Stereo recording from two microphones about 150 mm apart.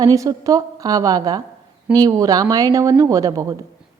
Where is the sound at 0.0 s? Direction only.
20° right (ahead or behind).